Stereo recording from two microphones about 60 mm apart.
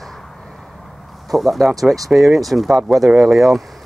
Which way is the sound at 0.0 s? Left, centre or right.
Centre.